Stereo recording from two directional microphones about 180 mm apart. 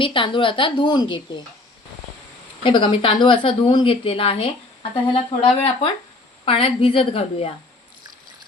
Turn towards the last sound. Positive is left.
turn(degrees=35)  # may be behind; listen again after turning